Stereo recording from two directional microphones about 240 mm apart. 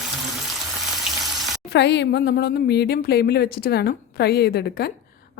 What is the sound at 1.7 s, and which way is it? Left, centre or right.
Speech, left.